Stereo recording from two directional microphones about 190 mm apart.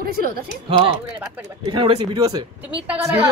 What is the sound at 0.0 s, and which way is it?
Speech, 50° right (ahead or behind).